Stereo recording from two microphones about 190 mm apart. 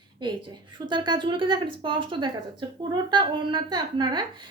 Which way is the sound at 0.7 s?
25° right (ahead or behind).